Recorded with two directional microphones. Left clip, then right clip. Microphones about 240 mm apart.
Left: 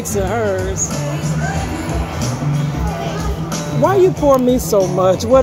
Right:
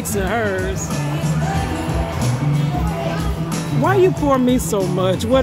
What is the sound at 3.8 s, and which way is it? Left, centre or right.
Speech, centre.